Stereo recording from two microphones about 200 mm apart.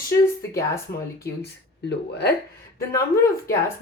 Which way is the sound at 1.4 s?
55° left (ahead or behind).